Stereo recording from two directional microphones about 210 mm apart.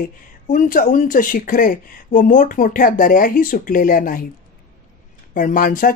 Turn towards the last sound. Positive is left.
turn(degrees=40)  # may be behind; listen again after turning